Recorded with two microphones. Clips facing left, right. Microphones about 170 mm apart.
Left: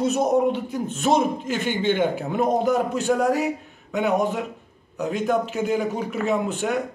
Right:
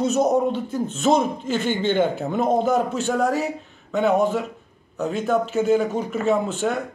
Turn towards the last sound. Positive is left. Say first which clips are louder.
# right 2 dB
turn(degrees=10)  # may be behind; listen again after turning